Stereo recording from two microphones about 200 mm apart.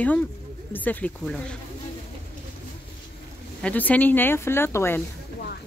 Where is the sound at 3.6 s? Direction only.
5° left (ahead or behind).